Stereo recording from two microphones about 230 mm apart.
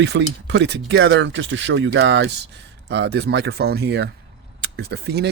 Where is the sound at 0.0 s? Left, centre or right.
Right.